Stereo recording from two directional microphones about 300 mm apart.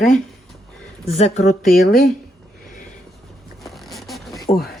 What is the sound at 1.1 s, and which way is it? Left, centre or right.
Speech, left.